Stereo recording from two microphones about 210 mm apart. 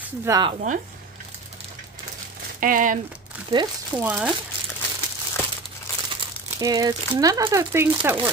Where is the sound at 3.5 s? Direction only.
20° right (ahead or behind).